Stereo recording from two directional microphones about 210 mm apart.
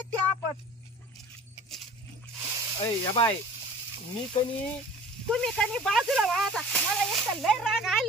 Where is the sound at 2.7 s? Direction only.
20° left (ahead or behind).